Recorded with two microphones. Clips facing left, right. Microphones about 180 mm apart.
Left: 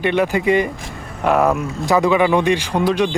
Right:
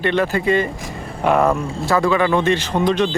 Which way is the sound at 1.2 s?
5° left (ahead or behind).